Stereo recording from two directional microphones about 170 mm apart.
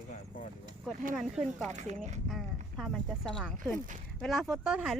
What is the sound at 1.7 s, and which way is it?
Speech, 45° right (ahead or behind).